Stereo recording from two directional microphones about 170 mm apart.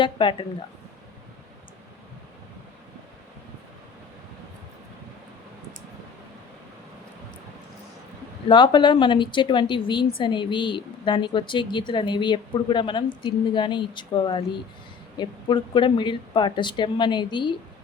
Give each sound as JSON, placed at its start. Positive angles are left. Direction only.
{"t": 0.0, "sound": "a woman's voice", "side_deg": 30}
{"t": 8.4, "sound": "a woman's voice", "side_deg": 30}